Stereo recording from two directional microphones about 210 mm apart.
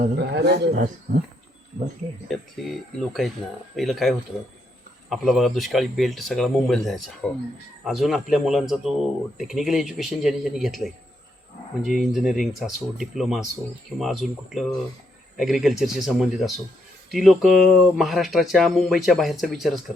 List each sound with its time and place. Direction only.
0.0 s a man's voice: 50° right (ahead or behind)
2.2 s speech: centre (ahead or behind)
3.8 s speech: centre (ahead or behind)